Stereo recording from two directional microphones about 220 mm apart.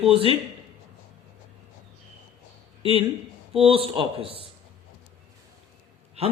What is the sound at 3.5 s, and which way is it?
Speech, 25° right (ahead or behind).